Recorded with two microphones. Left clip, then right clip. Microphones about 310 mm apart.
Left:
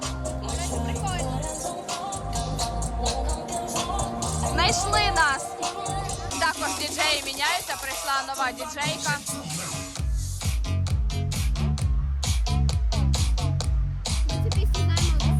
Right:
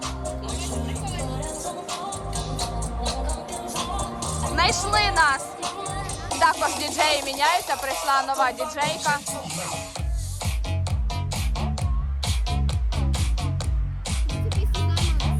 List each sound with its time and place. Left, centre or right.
0.0 s music: left
1.9 s music: left
4.5 s music: centre
5.5 s music: left
6.4 s speech: centre
11.3 s music: centre
12.2 s music: centre